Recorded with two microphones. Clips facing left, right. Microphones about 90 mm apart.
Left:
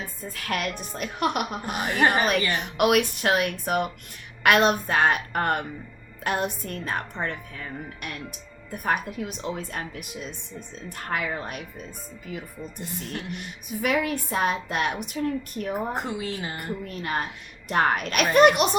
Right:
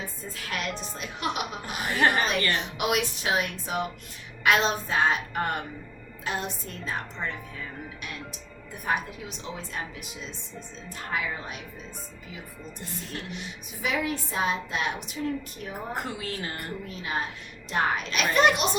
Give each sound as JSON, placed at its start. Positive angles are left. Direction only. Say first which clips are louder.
{"t": 0.0, "sound": "a woman's voice", "louder": "left 2 dB", "side_deg": 55}
{"t": 1.9, "sound": "a woman's voice", "louder": "left 2 dB", "side_deg": 15}
{"t": 2.6, "sound": "a woman's voice", "louder": "left 6 dB", "side_deg": 55}
{"t": 8.7, "sound": "a woman's voice", "louder": "left 3 dB", "side_deg": 50}
{"t": 13.3, "sound": "a woman's voice", "louder": "left 5 dB", "side_deg": 55}
{"t": 15.7, "sound": "a woman's voice", "louder": "left 4 dB", "side_deg": 20}
{"t": 16.9, "sound": "a woman's voice", "louder": "left 1 dB", "side_deg": 55}